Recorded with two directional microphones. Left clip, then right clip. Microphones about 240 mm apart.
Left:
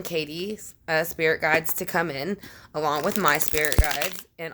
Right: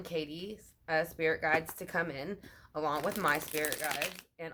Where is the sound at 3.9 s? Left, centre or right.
Centre.